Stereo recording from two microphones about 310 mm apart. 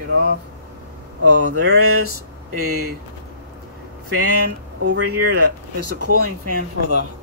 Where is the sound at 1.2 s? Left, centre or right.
Right.